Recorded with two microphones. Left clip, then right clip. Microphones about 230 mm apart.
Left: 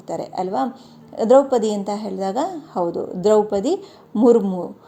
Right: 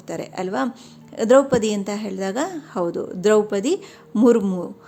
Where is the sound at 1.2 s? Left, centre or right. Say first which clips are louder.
Left 1 dB; right.